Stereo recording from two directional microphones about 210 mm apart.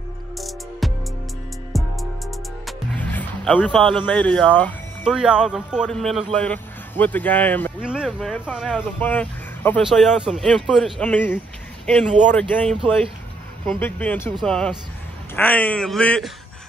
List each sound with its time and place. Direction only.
0.4 s music: centre (ahead or behind)
5.0 s speech: 5° right (ahead or behind)
7.8 s speech: 5° right (ahead or behind)
12.1 s speech: 35° right (ahead or behind)
12.4 s speech: 5° left (ahead or behind)